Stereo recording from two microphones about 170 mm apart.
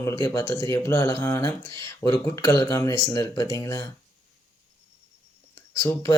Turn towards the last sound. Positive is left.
turn(degrees=15)  # may be behind; listen again after turning